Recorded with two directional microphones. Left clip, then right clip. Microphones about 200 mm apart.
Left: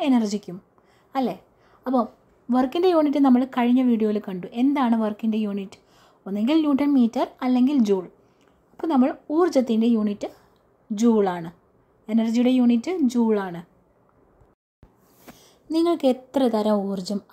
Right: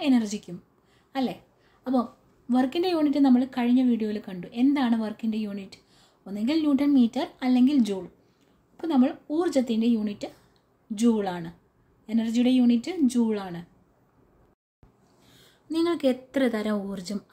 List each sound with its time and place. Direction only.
0.0 s a woman's voice: 20° left (ahead or behind)
15.3 s a woman's voice: 20° left (ahead or behind)